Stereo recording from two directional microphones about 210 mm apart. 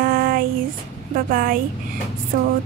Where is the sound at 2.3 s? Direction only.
40° right (ahead or behind).